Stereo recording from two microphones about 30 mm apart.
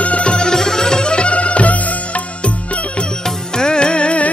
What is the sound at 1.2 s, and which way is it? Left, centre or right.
Music, left.